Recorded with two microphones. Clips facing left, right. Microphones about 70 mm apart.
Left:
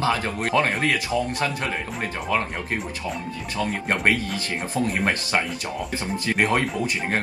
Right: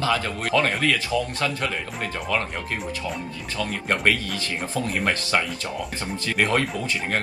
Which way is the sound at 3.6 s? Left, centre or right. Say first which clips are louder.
Left 1 dB; left.